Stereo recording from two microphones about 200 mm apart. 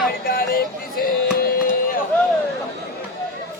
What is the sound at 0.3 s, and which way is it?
Music, 45° left (ahead or behind).